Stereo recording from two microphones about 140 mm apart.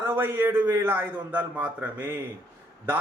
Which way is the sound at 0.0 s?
15° right (ahead or behind).